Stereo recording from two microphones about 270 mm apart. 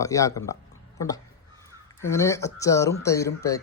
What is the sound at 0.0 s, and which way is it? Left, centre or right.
Speech, centre.